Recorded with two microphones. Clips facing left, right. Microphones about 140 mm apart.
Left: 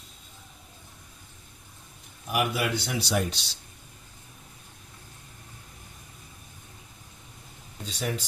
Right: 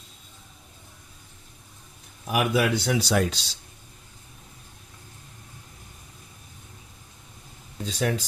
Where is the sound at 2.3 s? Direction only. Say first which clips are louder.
Right 4 dB; 90° right.